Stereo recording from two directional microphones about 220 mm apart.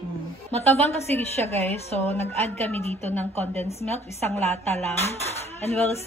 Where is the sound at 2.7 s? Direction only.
10° left (ahead or behind).